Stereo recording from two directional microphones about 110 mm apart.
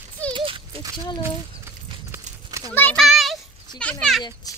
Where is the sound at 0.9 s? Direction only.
45° left (ahead or behind).